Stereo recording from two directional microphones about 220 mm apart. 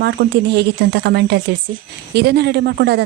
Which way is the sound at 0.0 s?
50° right (ahead or behind).